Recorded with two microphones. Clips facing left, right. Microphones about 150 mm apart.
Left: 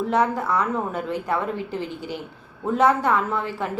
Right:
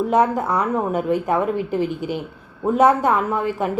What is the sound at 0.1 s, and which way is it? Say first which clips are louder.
A woman's voice: right 1 dB; 20° right (ahead or behind).